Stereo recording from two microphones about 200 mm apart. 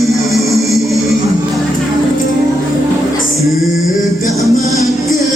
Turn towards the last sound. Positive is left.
turn(degrees=0)  # may be behind; listen again after turning